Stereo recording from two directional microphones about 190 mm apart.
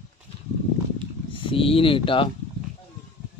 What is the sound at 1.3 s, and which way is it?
Speech, 25° left (ahead or behind).